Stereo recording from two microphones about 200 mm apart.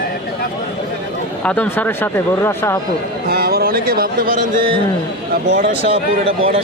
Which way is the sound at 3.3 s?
50° right (ahead or behind).